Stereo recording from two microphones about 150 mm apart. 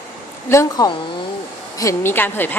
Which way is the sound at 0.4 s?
20° left (ahead or behind).